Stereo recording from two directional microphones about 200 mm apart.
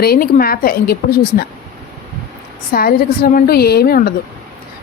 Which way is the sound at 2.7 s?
45° left (ahead or behind).